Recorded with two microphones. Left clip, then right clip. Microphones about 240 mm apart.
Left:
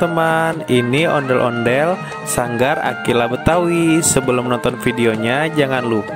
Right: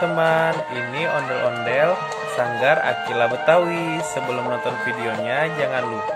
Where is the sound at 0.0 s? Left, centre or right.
Left.